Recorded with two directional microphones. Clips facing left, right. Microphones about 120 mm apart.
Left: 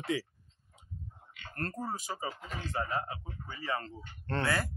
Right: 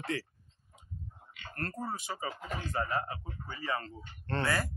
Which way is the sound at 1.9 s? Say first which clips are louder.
Even; 40° left (ahead or behind).